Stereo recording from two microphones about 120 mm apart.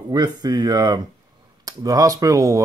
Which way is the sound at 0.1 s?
35° right (ahead or behind).